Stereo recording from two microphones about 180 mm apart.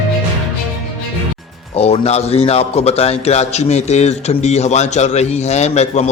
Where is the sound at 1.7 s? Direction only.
35° left (ahead or behind).